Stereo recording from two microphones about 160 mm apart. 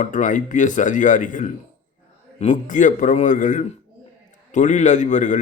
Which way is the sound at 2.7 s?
55° left (ahead or behind).